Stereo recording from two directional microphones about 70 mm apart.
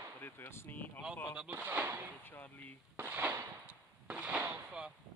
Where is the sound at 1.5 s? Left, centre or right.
Right.